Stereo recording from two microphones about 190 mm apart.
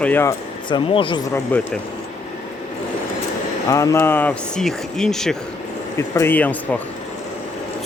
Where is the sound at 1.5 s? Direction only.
10° left (ahead or behind).